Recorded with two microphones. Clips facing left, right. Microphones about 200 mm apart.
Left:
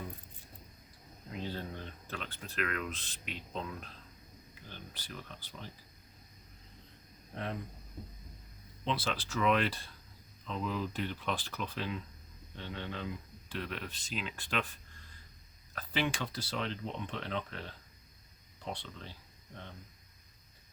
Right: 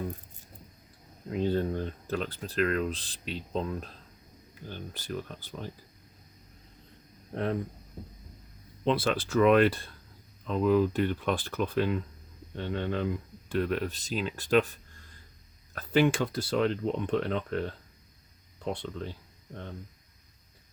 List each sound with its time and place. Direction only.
1.3 s speech: 55° right (ahead or behind)
8.8 s speech: 55° right (ahead or behind)
15.7 s speech: 50° right (ahead or behind)